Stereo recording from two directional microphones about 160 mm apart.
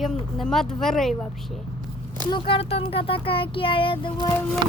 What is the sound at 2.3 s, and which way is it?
Speech, 30° left (ahead or behind).